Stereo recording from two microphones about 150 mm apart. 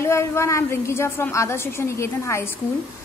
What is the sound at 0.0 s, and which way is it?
A woman's voice, 20° left (ahead or behind).